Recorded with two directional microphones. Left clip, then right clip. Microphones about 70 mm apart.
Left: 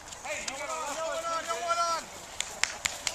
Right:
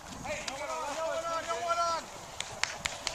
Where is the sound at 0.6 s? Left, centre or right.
Centre.